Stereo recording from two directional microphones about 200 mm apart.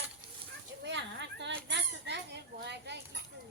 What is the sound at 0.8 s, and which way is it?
Children playing, 60° right (ahead or behind).